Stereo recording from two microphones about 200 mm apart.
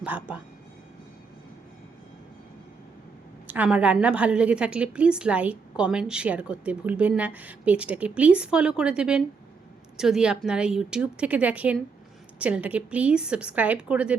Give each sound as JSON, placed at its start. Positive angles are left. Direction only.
{"t": 0.0, "sound": "a woman's voice", "side_deg": -10}
{"t": 3.4, "sound": "a woman's voice", "side_deg": -5}